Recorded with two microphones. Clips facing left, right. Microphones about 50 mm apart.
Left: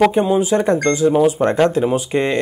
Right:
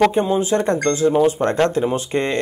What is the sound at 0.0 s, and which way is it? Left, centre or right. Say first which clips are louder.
Speech: left 2 dB; centre.